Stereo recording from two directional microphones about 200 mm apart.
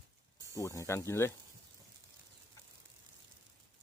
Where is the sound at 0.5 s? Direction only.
15° left (ahead or behind).